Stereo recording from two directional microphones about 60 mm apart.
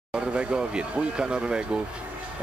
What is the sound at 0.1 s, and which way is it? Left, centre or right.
Speech, centre.